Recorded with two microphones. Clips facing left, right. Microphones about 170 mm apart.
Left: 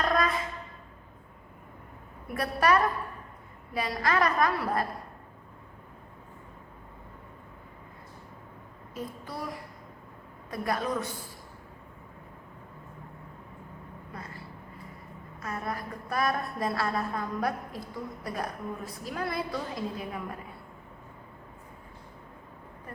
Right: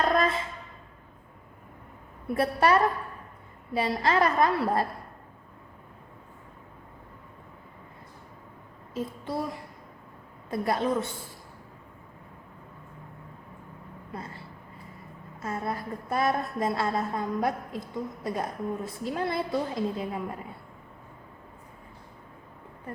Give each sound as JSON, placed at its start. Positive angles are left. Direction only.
{"t": 0.0, "sound": "music", "side_deg": -25}
{"t": 2.2, "sound": "a woman's voice", "side_deg": -25}
{"t": 9.0, "sound": "a woman's voice", "side_deg": -25}
{"t": 14.1, "sound": "a woman's voice", "side_deg": -25}